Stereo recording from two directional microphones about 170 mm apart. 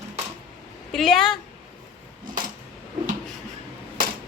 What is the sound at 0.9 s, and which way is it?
Speech, centre (ahead or behind).